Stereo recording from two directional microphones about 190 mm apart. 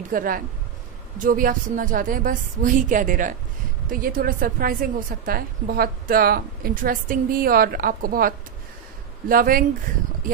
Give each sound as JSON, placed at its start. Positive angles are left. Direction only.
{"t": 0.1, "sound": "a woman's voice", "side_deg": -50}